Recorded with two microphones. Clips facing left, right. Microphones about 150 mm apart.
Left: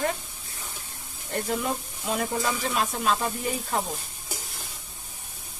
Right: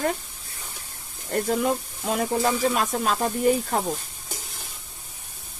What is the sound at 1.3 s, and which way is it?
Sizzle, 40° right (ahead or behind).